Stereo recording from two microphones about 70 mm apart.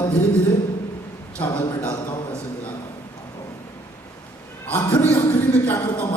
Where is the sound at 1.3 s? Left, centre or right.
Centre.